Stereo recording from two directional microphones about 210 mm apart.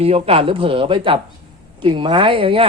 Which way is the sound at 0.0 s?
25° right (ahead or behind).